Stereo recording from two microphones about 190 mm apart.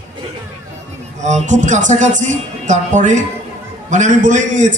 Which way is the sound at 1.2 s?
40° right (ahead or behind).